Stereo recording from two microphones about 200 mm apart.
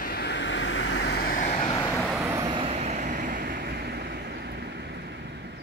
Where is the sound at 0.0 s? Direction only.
55° left (ahead or behind).